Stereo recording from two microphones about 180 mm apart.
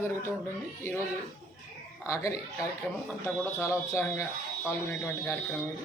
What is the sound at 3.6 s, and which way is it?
A woman's voice, 15° left (ahead or behind).